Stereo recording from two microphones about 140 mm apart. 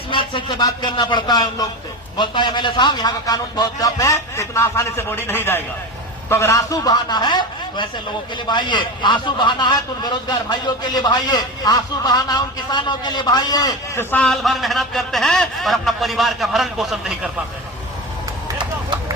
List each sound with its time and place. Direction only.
0.1 s a man's voice: 40° left (ahead or behind)
14.0 s a man's voice: 10° left (ahead or behind)